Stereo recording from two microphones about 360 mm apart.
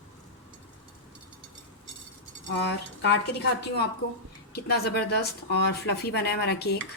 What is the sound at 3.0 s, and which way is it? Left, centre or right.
Speech, left.